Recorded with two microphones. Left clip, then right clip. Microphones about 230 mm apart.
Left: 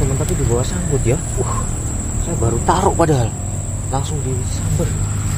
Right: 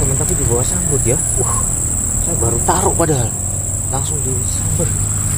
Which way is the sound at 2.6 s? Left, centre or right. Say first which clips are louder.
Left 2 dB; centre.